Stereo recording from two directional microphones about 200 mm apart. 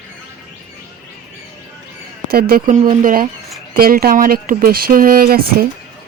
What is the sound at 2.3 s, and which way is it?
Speech, 50° right (ahead or behind).